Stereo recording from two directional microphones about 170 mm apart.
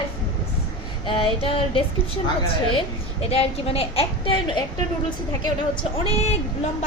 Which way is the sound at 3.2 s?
35° left (ahead or behind).